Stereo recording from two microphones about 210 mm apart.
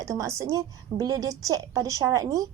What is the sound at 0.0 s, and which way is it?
A woman's voice, 15° right (ahead or behind).